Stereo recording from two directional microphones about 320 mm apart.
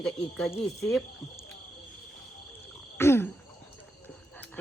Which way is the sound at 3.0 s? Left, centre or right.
Centre.